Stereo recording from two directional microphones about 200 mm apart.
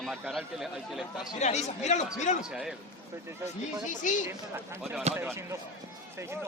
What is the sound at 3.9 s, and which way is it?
Speech, 40° left (ahead or behind).